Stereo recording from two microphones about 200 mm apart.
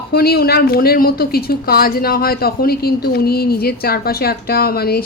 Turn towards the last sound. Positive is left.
turn(degrees=50)  # may be behind; listen again after turning